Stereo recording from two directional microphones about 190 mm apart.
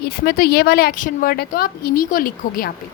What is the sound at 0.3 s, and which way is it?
A woman's voice, 50° left (ahead or behind).